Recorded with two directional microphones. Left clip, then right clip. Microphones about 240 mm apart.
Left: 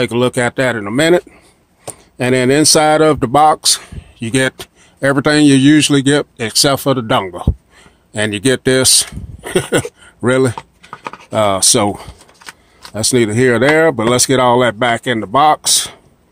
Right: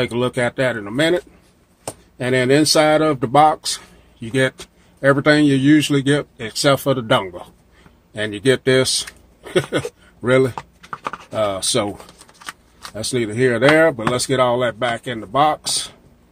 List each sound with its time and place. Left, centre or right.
0.0 s speech: left
10.5 s typing: centre
11.2 s speech: left
12.4 s keys jangling: centre
12.9 s speech: left